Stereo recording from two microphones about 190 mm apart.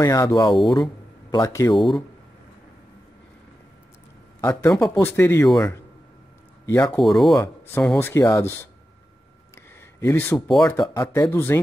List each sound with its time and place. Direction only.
0.0 s speech: 20° left (ahead or behind)
1.8 s speech: centre (ahead or behind)
4.4 s a man's voice: 15° left (ahead or behind)
6.9 s speech: centre (ahead or behind)
7.3 s speech: 15° left (ahead or behind)
9.9 s speech: 15° left (ahead or behind)